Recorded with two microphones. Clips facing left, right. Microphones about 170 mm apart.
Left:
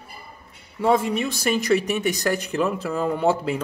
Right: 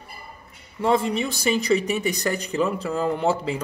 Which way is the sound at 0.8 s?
5° left (ahead or behind).